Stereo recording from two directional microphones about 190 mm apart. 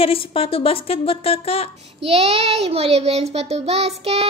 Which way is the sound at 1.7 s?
35° right (ahead or behind).